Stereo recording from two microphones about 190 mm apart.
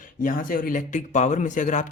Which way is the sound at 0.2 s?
45° left (ahead or behind).